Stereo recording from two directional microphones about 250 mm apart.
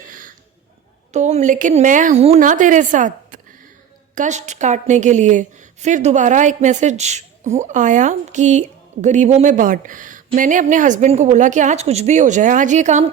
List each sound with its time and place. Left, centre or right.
0.0 s cough: right
1.1 s a woman's voice: right